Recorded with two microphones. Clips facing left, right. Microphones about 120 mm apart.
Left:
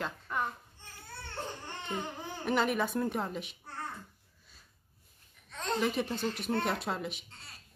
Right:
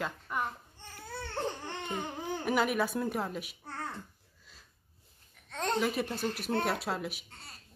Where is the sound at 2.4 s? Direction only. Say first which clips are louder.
Even; 5° right (ahead or behind).